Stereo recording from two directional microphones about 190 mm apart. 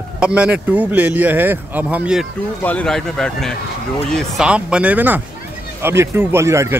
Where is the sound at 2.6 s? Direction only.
10° left (ahead or behind); by 6.7 s 15° right (ahead or behind).